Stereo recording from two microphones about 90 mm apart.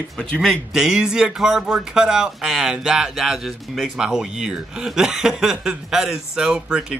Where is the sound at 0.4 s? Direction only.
Centre (ahead or behind).